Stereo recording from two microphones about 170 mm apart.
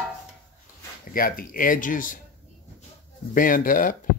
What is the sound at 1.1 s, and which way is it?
Speech, 55° left (ahead or behind).